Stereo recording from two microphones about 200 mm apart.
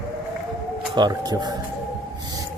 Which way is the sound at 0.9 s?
20° right (ahead or behind).